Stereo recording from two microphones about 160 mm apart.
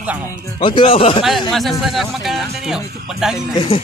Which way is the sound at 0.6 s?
30° left (ahead or behind).